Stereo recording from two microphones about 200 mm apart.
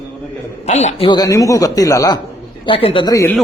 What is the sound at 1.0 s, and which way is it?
A man's voice, 20° left (ahead or behind).